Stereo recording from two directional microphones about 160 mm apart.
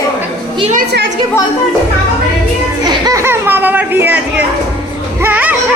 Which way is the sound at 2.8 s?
25° right (ahead or behind).